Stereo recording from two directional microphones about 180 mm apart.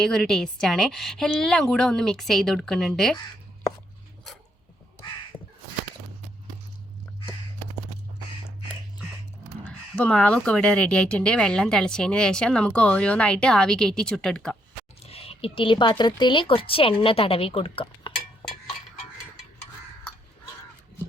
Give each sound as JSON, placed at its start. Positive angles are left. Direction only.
{"t": 0.0, "sound": "speech", "side_deg": 5}
{"t": 9.6, "sound": "speech", "side_deg": 5}
{"t": 15.0, "sound": "speech", "side_deg": 35}